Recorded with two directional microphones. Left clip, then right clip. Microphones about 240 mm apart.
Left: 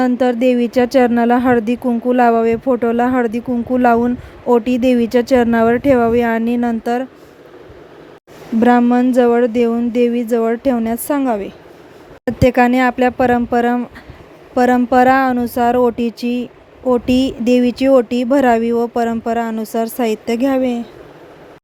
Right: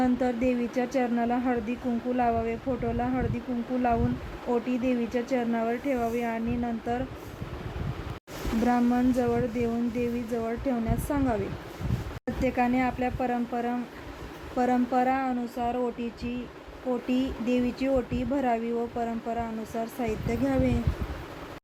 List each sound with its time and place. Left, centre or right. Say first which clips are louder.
0.0 s speech: left 12 dB; left
8.6 s speech: left 13 dB; left